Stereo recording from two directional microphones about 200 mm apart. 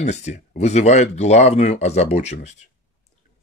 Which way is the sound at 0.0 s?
35° left (ahead or behind).